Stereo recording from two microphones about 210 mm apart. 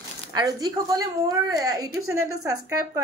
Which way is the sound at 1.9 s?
85° right.